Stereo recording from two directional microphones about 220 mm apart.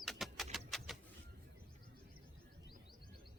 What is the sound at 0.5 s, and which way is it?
Vehicle, centre (ahead or behind).